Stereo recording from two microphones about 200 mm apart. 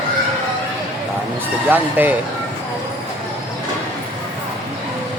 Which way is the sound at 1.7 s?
10° right (ahead or behind).